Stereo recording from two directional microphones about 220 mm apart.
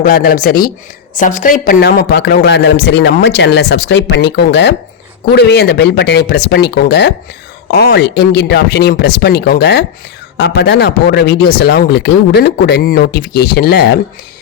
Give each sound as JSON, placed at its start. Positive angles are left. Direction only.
{"t": 0.0, "sound": "a woman's voice", "side_deg": 40}